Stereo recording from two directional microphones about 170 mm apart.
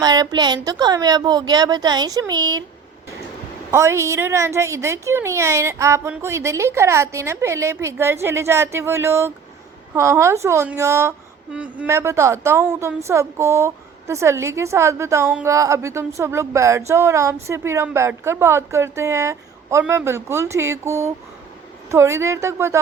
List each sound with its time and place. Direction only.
0.0 s a woman's voice: 25° right (ahead or behind)
3.7 s a woman's voice: 15° right (ahead or behind)